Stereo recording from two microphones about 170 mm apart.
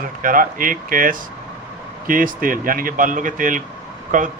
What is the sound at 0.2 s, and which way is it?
A man's voice, 55° right (ahead or behind).